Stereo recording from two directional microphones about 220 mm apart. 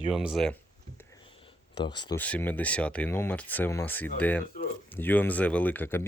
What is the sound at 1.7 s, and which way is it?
Speech, 20° left (ahead or behind).